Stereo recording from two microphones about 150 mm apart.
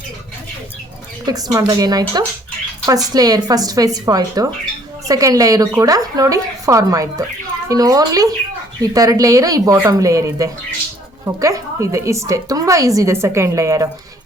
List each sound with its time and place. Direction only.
1.2 s a woman's voice: 25° right (ahead or behind)